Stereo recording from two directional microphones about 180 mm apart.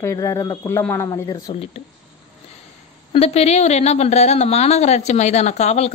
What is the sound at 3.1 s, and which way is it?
A woman's voice, 35° left (ahead or behind).